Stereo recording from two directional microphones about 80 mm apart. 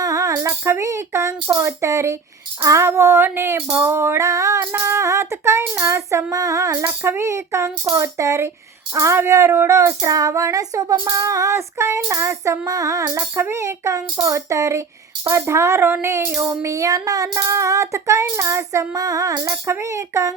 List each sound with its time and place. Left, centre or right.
0.0 s speech: right
4.7 s speech: right
6.3 s a sound: right
6.8 s speech: right
13.1 s speech: right
19.6 s speech: right